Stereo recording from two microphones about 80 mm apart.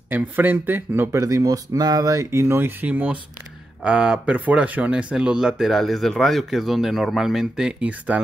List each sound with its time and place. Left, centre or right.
0.1 s speech: right
1.2 s speech: right; by 8.2 s centre